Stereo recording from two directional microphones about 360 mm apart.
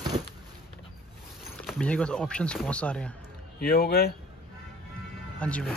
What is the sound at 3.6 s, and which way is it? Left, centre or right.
Speech, left.